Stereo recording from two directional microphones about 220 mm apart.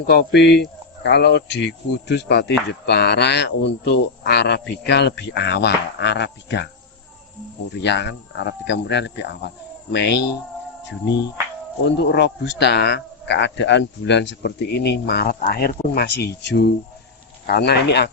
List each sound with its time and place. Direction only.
0.1 s speech: 50° left (ahead or behind)
7.7 s speech: 50° left (ahead or behind)
11.9 s speech: 50° left (ahead or behind)